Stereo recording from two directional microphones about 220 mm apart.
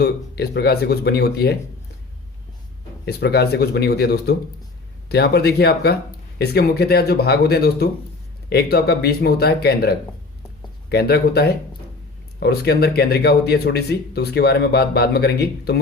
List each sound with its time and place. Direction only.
0.0 s speech: 45° left (ahead or behind)
3.1 s speech: 45° left (ahead or behind)